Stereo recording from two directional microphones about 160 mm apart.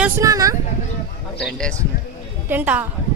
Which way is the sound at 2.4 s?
10° right (ahead or behind).